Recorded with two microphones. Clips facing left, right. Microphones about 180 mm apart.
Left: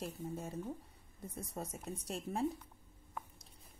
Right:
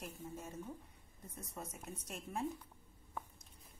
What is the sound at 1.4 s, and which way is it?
A woman's voice, 35° left (ahead or behind).